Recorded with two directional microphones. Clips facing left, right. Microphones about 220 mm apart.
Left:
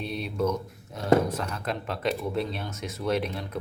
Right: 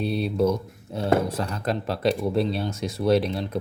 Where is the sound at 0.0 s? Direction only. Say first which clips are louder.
Right 6 dB; 35° right (ahead or behind).